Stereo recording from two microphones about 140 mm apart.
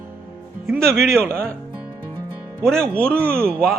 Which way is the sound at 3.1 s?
15° right (ahead or behind).